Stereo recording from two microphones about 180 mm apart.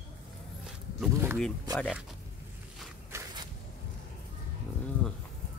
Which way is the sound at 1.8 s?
5° right (ahead or behind).